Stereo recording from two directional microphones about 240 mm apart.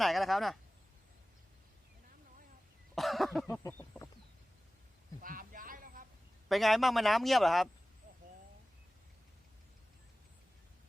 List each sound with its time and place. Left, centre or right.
0.0 s speech: centre
2.9 s cough: centre
3.6 s chicken: centre
5.2 s a sound: right
6.5 s speech: centre